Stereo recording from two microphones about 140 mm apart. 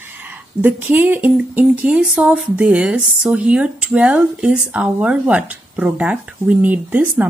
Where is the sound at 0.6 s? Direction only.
15° right (ahead or behind).